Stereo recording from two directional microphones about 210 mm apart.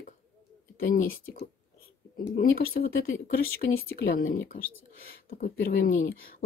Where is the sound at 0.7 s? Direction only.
45° left (ahead or behind).